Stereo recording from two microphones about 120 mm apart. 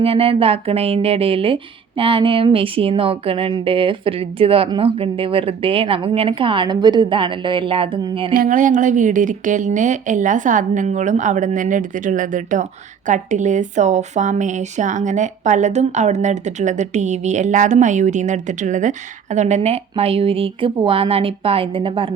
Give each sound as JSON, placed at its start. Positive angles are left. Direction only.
{"t": 0.0, "sound": "speech", "side_deg": -50}
{"t": 8.4, "sound": "speech", "side_deg": -90}